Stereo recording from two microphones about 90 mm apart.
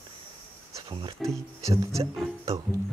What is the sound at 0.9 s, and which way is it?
Speech, 65° right (ahead or behind).